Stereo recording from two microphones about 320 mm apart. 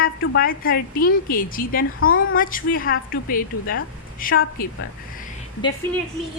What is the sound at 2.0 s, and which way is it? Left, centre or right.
Speech, left.